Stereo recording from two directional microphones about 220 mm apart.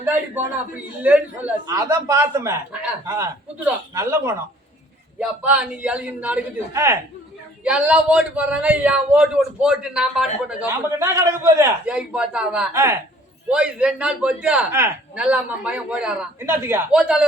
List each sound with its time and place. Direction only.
1.0 s a man's voice: 5° right (ahead or behind)
10.6 s a man's voice: 15° right (ahead or behind)